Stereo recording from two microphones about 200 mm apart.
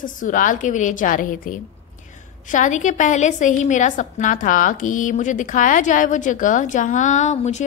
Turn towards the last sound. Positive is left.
turn(degrees=35)  # may be behind; listen again after turning